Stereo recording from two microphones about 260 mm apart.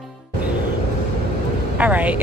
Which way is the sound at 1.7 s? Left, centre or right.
Centre.